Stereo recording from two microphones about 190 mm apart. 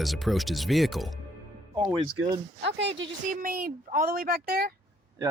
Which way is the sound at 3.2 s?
45° right (ahead or behind).